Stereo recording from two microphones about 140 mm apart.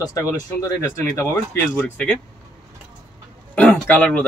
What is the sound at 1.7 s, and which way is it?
Speech, 10° left (ahead or behind).